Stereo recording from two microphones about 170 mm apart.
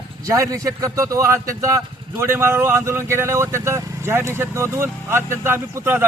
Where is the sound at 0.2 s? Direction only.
20° right (ahead or behind).